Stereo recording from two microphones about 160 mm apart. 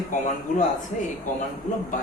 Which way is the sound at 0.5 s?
55° left (ahead or behind).